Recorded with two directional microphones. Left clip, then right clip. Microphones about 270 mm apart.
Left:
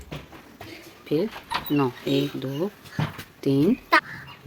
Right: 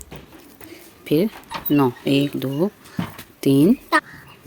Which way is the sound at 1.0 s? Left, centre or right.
Right.